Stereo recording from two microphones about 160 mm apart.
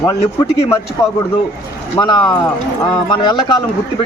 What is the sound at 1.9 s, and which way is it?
Speech, 25° left (ahead or behind).